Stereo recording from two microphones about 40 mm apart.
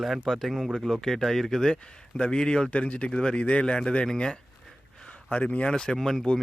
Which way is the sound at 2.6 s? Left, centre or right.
Left.